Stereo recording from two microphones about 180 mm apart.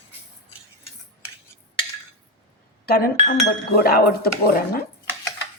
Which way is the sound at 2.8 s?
60° left (ahead or behind).